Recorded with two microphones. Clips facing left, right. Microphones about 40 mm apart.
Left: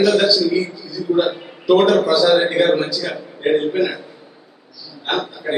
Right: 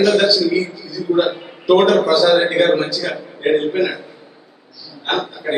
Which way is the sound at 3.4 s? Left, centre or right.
Centre.